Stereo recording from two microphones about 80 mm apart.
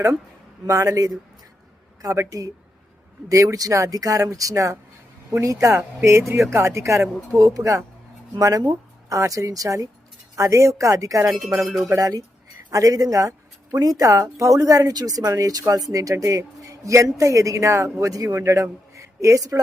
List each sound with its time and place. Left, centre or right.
0.7 s speech: right
11.3 s a sound: centre
11.9 s speech: right